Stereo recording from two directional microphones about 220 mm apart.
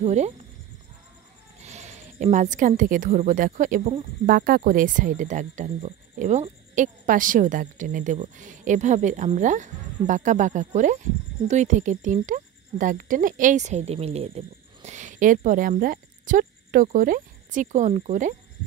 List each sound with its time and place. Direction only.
0.0 s a woman's voice: 30° right (ahead or behind)
1.6 s a woman's voice: 30° right (ahead or behind)